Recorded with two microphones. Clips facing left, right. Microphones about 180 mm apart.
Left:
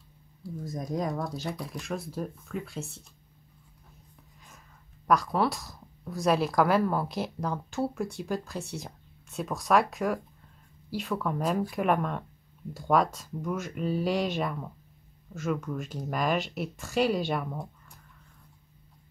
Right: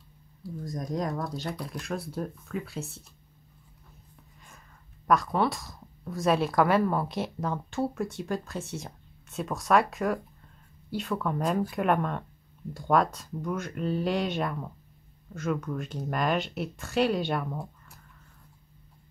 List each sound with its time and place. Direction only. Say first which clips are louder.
0.4 s speech: even; centre (ahead or behind)
4.4 s speech: even; 5° left (ahead or behind)